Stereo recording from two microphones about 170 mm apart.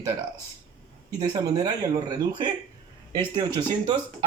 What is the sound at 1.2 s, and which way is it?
Speech, 20° right (ahead or behind).